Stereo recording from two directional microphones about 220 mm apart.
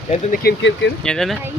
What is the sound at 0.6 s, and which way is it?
Speech, 55° left (ahead or behind).